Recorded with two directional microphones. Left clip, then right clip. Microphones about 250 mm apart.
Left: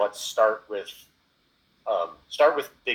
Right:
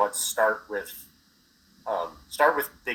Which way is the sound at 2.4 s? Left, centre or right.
Right.